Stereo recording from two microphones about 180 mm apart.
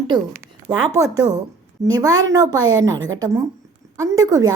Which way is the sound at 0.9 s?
20° right (ahead or behind).